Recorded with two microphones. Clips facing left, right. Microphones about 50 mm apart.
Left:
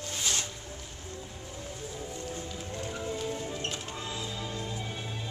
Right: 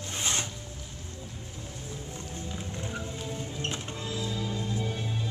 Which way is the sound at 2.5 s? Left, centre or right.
Centre.